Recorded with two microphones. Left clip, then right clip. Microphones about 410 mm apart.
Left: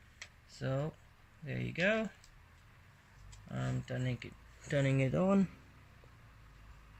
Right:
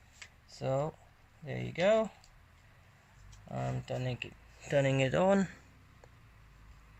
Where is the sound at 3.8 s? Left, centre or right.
Centre.